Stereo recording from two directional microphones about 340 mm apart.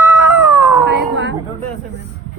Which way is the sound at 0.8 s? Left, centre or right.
Right.